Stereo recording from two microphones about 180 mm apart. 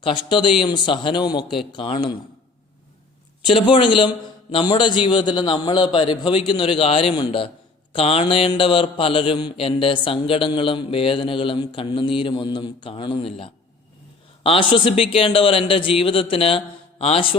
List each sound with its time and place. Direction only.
0.0 s speech: 25° left (ahead or behind)
3.4 s a man's voice: 30° left (ahead or behind)